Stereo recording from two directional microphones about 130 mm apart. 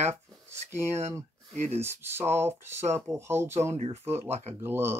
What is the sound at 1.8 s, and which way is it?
Speech, 20° right (ahead or behind).